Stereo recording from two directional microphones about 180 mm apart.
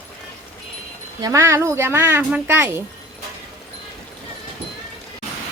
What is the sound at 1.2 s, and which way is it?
Speech, 15° right (ahead or behind).